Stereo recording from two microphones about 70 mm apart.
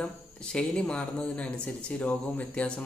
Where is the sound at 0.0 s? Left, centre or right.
Centre.